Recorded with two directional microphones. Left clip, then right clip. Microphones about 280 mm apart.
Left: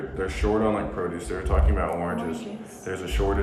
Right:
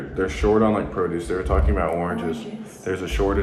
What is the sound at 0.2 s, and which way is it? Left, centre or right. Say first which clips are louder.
Speech: right 6 dB; centre.